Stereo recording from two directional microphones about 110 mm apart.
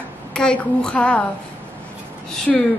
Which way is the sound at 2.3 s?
10° left (ahead or behind).